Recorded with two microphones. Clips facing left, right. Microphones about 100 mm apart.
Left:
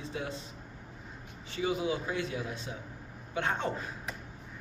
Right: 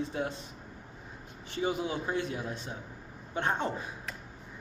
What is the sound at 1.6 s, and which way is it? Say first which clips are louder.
Speech: even; 35° right (ahead or behind).